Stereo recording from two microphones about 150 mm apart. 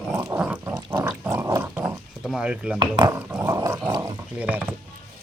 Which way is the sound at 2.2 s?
Centre (ahead or behind).